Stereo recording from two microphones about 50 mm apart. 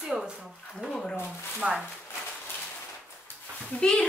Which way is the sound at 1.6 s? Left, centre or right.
Centre.